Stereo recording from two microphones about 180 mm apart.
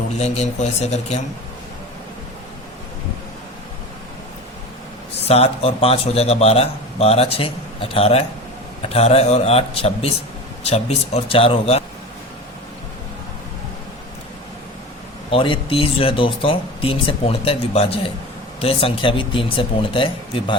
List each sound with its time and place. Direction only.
0.2 s a man's voice: 35° left (ahead or behind)
5.3 s a man's voice: 35° left (ahead or behind)
15.3 s a man's voice: 30° left (ahead or behind)